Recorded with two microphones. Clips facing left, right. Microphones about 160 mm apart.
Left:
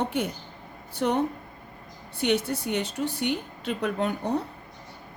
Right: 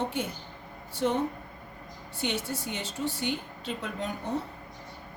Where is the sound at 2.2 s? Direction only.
65° left (ahead or behind).